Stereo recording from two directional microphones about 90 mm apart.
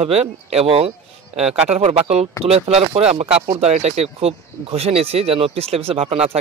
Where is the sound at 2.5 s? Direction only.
90° right.